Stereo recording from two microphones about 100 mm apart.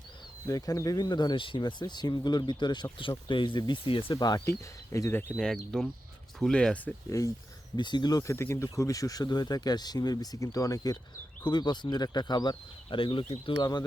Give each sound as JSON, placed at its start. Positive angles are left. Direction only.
{"t": 0.4, "sound": "speech", "side_deg": 40}
{"t": 4.2, "sound": "speech", "side_deg": 40}
{"t": 4.4, "sound": "speech", "side_deg": 30}
{"t": 5.7, "sound": "speech", "side_deg": 5}
{"t": 7.1, "sound": "speech", "side_deg": 35}
{"t": 7.8, "sound": "speech", "side_deg": 50}
{"t": 8.3, "sound": "speech", "side_deg": 30}
{"t": 13.6, "sound": "speech", "side_deg": 45}